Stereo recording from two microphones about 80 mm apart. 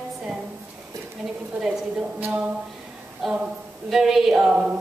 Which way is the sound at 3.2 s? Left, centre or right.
Centre.